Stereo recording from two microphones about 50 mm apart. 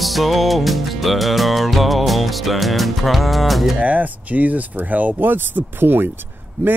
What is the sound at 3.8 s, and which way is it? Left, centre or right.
Speech, right.